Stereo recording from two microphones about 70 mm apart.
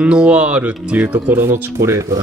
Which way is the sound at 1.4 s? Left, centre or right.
Right.